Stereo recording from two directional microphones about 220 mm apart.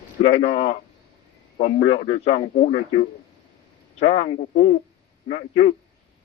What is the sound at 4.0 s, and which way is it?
A man's voice, 30° left (ahead or behind).